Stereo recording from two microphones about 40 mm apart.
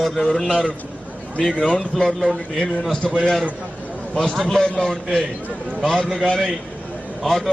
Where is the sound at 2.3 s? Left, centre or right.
Centre.